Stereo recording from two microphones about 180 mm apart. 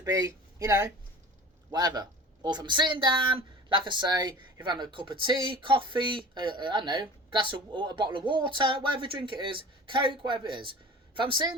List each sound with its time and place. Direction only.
0.0 s a woman's voice: 20° right (ahead or behind)